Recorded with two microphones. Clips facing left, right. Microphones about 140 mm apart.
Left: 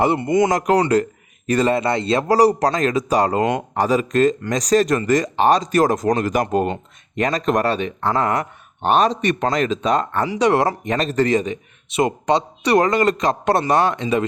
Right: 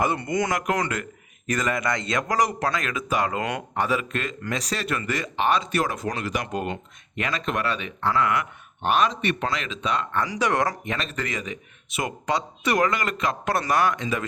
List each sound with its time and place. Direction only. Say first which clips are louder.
0.0 s speech: left 8 dB; 25° left (ahead or behind)
0.5 s speech: left 9 dB; 35° left (ahead or behind)
10.2 s speech: left 8 dB; 25° left (ahead or behind)